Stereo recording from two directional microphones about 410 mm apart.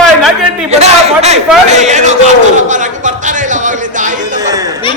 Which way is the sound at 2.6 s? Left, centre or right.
Centre.